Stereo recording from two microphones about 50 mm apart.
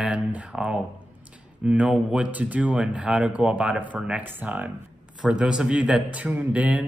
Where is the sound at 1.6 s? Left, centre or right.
Right.